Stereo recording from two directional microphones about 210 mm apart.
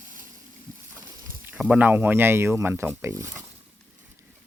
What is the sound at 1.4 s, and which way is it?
Speech, 5° right (ahead or behind).